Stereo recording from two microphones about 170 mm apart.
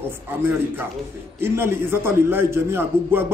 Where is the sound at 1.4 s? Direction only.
15° right (ahead or behind).